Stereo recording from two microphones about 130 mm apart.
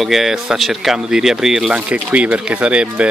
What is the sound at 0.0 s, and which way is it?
Speech, centre (ahead or behind).